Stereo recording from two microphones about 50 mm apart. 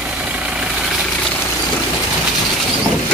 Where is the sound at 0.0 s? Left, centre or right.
Right.